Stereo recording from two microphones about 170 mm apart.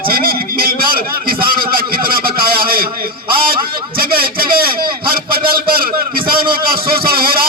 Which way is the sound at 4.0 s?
60° right (ahead or behind).